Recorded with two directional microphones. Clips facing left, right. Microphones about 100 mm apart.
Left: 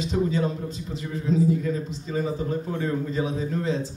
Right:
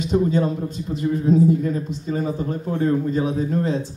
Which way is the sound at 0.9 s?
50° right (ahead or behind).